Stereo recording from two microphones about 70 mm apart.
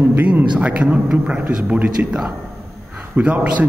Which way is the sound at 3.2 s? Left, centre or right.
Right.